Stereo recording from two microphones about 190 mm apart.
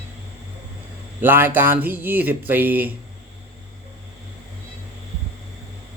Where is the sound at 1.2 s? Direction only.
10° right (ahead or behind).